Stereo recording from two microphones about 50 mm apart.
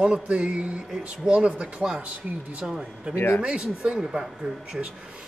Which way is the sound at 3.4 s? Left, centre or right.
Centre.